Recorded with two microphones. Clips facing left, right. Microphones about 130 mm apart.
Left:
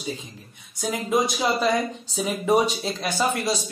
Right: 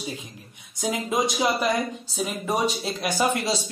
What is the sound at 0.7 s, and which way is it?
Speech, 20° right (ahead or behind).